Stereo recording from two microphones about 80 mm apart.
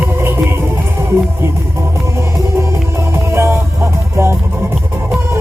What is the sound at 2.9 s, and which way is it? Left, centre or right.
Music, right.